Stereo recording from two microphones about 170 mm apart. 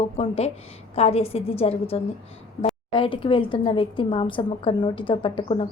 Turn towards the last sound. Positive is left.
turn(degrees=30)  # may be behind; listen again after turning